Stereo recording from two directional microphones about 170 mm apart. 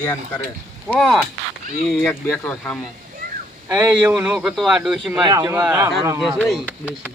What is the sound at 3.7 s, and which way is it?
Speech, 20° right (ahead or behind).